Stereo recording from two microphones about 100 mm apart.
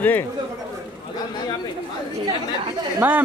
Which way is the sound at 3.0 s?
20° right (ahead or behind).